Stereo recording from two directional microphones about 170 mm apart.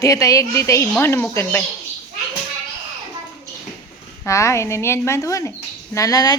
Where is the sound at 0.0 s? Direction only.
20° left (ahead or behind).